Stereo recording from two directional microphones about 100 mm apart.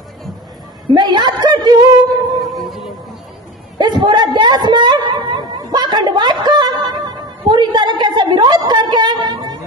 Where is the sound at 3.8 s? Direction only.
45° right (ahead or behind).